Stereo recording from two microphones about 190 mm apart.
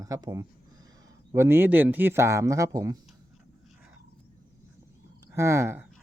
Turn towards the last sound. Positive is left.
turn(degrees=-15)  # may be behind; listen again after turning